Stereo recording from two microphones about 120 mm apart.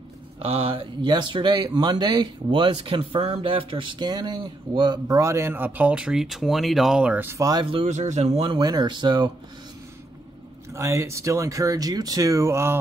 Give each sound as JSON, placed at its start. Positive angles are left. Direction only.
{"t": 0.5, "sound": "speech", "side_deg": -50}
{"t": 7.2, "sound": "speech", "side_deg": -25}
{"t": 7.8, "sound": "speech", "side_deg": -75}
{"t": 8.5, "sound": "speech", "side_deg": -35}
{"t": 10.7, "sound": "speech", "side_deg": -25}